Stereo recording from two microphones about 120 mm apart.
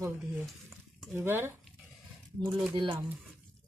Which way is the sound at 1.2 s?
20° right (ahead or behind).